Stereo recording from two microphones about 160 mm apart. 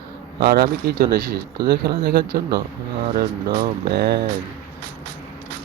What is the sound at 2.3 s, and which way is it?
Speech, 70° right (ahead or behind).